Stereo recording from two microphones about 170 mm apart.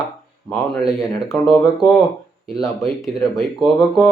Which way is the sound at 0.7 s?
Centre (ahead or behind).